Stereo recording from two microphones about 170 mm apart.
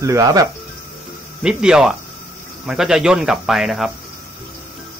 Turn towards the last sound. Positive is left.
turn(degrees=0)  # may be behind; listen again after turning